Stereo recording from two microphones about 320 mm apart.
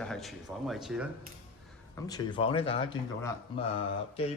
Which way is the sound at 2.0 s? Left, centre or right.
Centre.